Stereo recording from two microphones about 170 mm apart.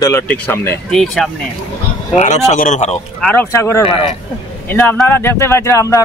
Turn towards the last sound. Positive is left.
turn(degrees=15)  # may be behind; listen again after turning